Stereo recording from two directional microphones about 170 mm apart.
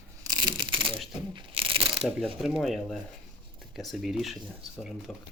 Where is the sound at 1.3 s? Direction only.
30° right (ahead or behind).